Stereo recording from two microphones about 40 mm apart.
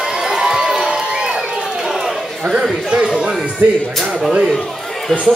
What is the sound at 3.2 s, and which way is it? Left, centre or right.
Speech, centre.